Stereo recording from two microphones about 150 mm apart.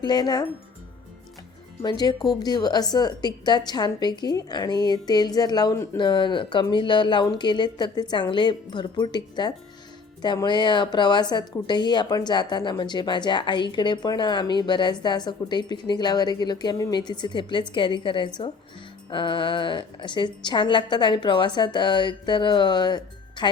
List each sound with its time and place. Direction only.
0.0 s a woman's voice: 30° left (ahead or behind)
1.8 s a woman's voice: 30° left (ahead or behind)
6.0 s a woman's voice: 30° left (ahead or behind)